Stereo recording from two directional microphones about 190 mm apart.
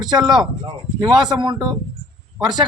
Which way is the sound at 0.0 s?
20° right (ahead or behind).